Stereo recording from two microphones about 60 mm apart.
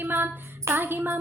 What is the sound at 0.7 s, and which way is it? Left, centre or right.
Music, right.